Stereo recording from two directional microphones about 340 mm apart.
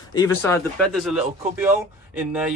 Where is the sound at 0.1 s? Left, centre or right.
Centre.